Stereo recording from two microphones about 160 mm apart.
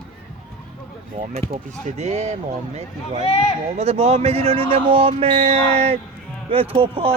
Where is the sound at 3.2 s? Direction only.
40° left (ahead or behind).